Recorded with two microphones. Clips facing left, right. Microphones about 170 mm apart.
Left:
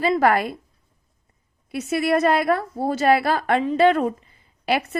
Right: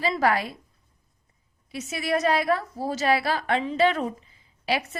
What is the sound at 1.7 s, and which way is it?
A woman's voice, 60° left (ahead or behind).